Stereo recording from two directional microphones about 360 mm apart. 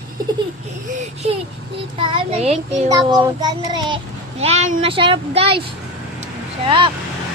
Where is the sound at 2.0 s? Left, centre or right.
Centre.